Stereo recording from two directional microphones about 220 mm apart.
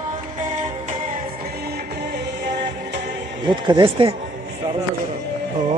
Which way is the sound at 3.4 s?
20° right (ahead or behind).